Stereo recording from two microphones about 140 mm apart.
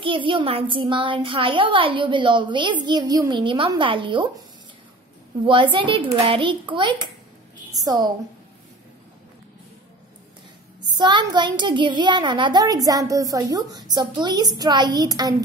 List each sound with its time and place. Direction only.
0.0 s a child's voice: 40° right (ahead or behind)
5.4 s a child's voice: 35° right (ahead or behind)
10.9 s a child's voice: 30° right (ahead or behind)